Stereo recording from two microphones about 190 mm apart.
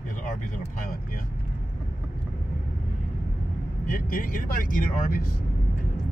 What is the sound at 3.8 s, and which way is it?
Speech, 45° left (ahead or behind).